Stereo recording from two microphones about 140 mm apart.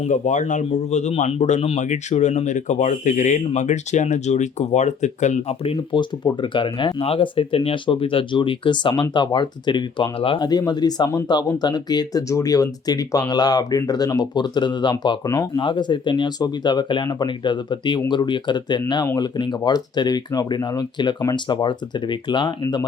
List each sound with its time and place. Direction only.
0.0 s speech: 60° left (ahead or behind); by 22.9 s 30° left (ahead or behind)